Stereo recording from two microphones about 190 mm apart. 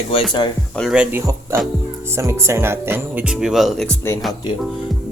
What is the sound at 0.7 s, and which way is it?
Speech, centre (ahead or behind).